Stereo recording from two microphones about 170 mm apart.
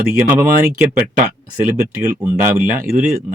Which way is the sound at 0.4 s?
55° right (ahead or behind).